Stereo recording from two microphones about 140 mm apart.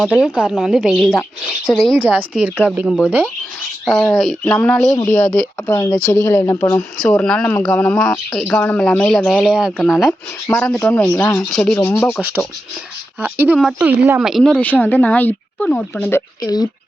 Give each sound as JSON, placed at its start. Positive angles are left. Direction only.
{"t": 0.1, "sound": "speech", "side_deg": -5}
{"t": 2.0, "sound": "speech", "side_deg": -10}
{"t": 3.8, "sound": "speech", "side_deg": 5}
{"t": 7.2, "sound": "speech", "side_deg": 5}
{"t": 10.1, "sound": "speech", "side_deg": 15}
{"t": 11.1, "sound": "speech", "side_deg": 20}
{"t": 11.5, "sound": "speech", "side_deg": 5}
{"t": 13.2, "sound": "speech", "side_deg": -15}
{"t": 14.2, "sound": "speech", "side_deg": 0}
{"t": 14.6, "sound": "speech", "side_deg": 10}
{"t": 16.4, "sound": "speech", "side_deg": 30}